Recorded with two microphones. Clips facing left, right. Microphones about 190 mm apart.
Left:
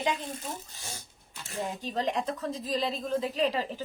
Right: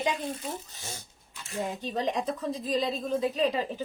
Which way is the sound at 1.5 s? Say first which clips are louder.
Right 2 dB; 20° right (ahead or behind).